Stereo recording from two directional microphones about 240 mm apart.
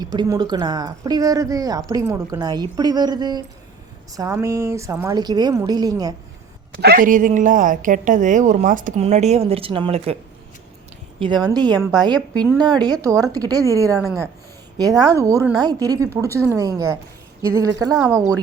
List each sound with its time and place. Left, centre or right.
0.0 s a woman's voice: centre
6.8 s a woman's voice: right
11.4 s a woman's voice: centre